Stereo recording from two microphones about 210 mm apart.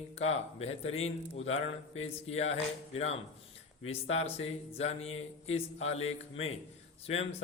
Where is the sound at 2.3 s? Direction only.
30° left (ahead or behind).